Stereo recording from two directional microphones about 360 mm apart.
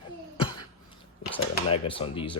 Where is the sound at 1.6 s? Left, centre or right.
Centre.